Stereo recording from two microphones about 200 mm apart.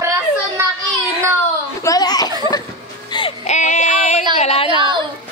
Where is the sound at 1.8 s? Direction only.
20° left (ahead or behind).